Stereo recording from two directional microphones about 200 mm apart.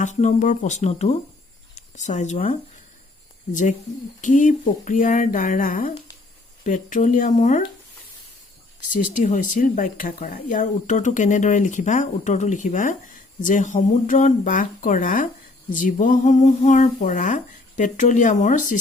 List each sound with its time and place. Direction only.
0.0 s speech: 35° left (ahead or behind)
9.2 s speech: 40° left (ahead or behind)